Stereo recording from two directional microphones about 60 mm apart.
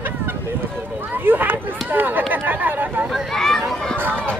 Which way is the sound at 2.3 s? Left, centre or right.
Right.